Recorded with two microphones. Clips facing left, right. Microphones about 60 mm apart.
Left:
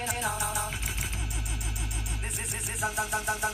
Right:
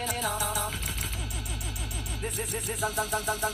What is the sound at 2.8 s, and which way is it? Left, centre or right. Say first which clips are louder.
Music: even; centre.